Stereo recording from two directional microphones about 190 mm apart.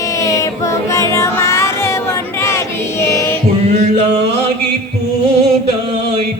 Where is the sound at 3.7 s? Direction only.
35° right (ahead or behind).